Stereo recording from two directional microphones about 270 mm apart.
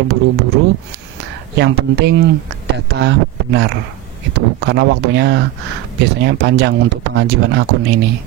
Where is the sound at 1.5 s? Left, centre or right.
Right.